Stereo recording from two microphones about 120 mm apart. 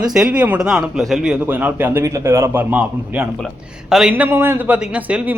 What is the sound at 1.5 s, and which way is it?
Speech, 15° right (ahead or behind).